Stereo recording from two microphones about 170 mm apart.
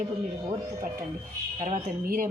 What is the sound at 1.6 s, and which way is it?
Speech, 55° right (ahead or behind).